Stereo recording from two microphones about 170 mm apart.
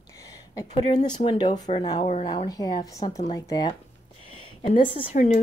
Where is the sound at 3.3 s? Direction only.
20° left (ahead or behind).